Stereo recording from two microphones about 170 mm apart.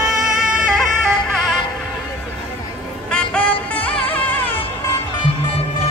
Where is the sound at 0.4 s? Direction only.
5° right (ahead or behind).